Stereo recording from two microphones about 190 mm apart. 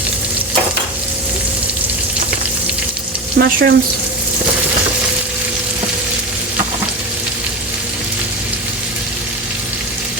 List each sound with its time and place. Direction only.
3.3 s speech: 55° right (ahead or behind)